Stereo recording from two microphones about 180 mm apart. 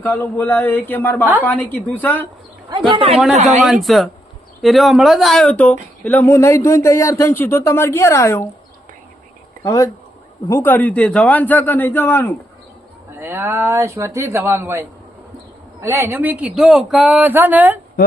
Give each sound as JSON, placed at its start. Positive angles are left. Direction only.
{"t": 0.0, "sound": "speech", "side_deg": 10}
{"t": 2.6, "sound": "speech", "side_deg": -25}
{"t": 3.3, "sound": "speech", "side_deg": -40}
{"t": 3.6, "sound": "speech", "side_deg": 0}
{"t": 9.6, "sound": "speech", "side_deg": 20}
{"t": 13.1, "sound": "speech", "side_deg": -10}